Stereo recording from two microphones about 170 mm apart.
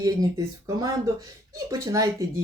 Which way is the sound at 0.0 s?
20° right (ahead or behind).